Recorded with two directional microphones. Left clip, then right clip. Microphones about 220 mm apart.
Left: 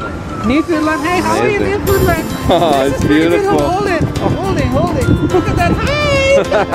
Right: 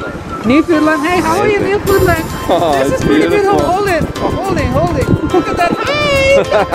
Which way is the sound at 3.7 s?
20° right (ahead or behind).